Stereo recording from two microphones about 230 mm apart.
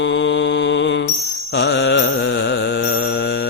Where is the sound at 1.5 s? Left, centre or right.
Left.